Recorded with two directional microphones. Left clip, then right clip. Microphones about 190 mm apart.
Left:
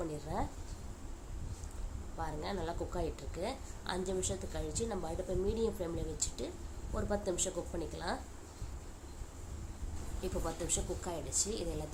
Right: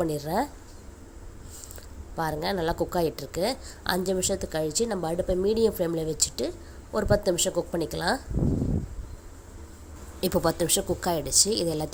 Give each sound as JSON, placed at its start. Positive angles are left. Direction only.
{"t": 0.0, "sound": "a woman's voice", "side_deg": -45}
{"t": 2.1, "sound": "a woman's voice", "side_deg": -45}
{"t": 10.2, "sound": "a woman's voice", "side_deg": -50}